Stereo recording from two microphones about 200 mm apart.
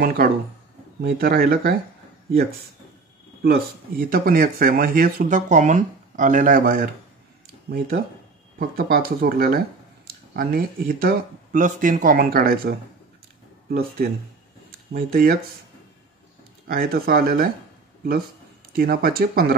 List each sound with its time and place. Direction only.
0.0 s speech: 50° right (ahead or behind)
3.4 s speech: 50° right (ahead or behind)
8.5 s speech: 45° right (ahead or behind)
16.6 s speech: 45° right (ahead or behind)
18.8 s speech: 50° right (ahead or behind)